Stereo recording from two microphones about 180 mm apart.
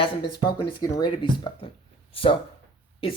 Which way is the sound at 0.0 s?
25° left (ahead or behind).